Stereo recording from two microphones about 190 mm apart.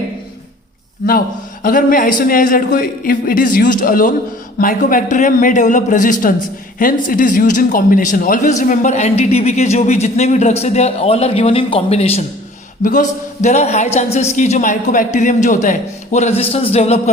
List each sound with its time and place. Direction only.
1.6 s a man's voice: 45° left (ahead or behind)